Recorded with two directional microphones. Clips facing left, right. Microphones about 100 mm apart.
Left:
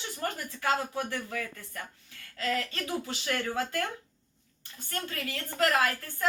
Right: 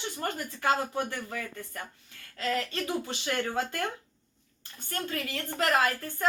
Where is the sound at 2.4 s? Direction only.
25° right (ahead or behind).